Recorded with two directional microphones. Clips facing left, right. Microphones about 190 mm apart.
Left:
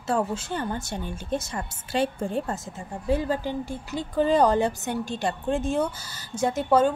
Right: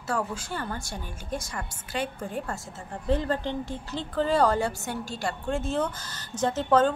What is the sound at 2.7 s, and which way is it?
Speech, 10° left (ahead or behind).